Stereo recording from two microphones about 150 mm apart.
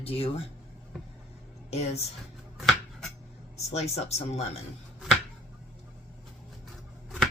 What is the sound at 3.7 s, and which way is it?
Speech, 45° left (ahead or behind).